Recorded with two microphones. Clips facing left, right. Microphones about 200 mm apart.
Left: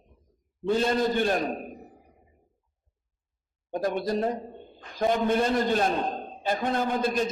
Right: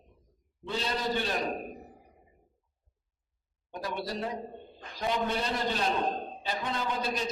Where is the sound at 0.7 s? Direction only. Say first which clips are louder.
Left 8 dB; 50° left (ahead or behind).